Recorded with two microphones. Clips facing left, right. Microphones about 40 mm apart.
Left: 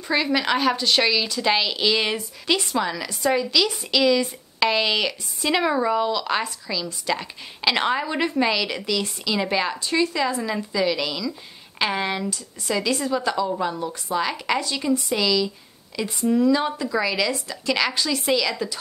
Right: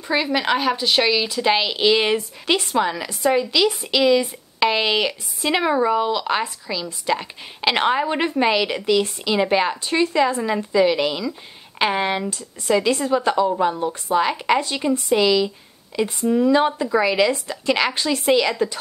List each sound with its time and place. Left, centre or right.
0.1 s a woman's voice: centre
12.3 s a woman's voice: right
16.3 s speech: centre
16.5 s a woman's voice: right